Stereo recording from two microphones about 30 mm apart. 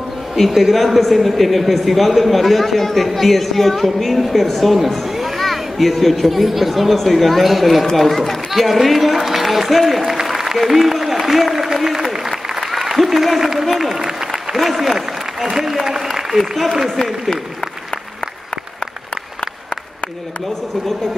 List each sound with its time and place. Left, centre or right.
0.6 s a man's voice: centre
10.2 s applause: centre
10.6 s speech: centre
11.5 s applause: centre
13.4 s speech: centre
13.7 s applause: centre
13.9 s applause: right
14.5 s speech: centre